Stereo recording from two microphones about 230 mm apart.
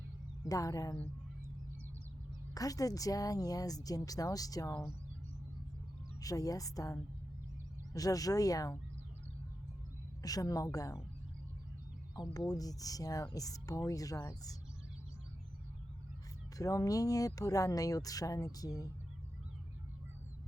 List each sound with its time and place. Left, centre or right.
0.4 s speech: centre
2.6 s speech: centre
6.1 s speech: centre
10.2 s speech: centre
12.1 s speech: centre
16.6 s speech: centre